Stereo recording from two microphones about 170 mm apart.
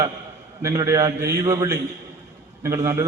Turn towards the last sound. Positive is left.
turn(degrees=-15)  # may be behind; listen again after turning